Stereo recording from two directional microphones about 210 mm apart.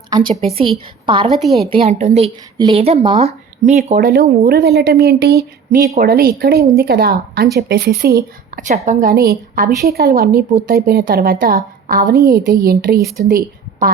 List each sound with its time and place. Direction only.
0.5 s a woman's voice: 25° right (ahead or behind)
1.3 s a woman's voice: centre (ahead or behind)
1.7 s a woman's voice: 30° right (ahead or behind)
4.0 s a woman's voice: 45° right (ahead or behind)